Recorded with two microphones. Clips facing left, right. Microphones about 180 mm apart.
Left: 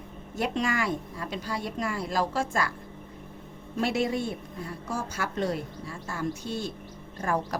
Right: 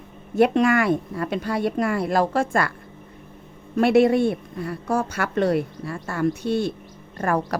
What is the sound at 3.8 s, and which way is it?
Speech, 60° right (ahead or behind).